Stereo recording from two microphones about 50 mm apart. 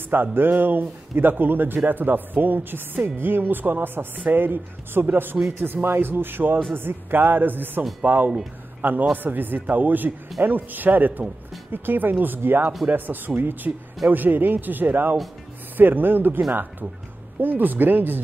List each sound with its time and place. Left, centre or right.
0.1 s a man's voice: right